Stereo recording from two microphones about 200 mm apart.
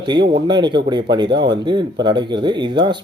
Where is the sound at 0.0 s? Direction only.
20° right (ahead or behind).